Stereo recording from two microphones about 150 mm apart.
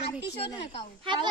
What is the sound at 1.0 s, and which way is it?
Speech, 30° right (ahead or behind).